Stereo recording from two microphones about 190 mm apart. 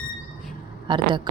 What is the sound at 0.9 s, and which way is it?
Speech, 25° right (ahead or behind).